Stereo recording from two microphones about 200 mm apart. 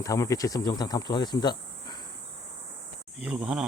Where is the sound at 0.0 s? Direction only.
15° left (ahead or behind).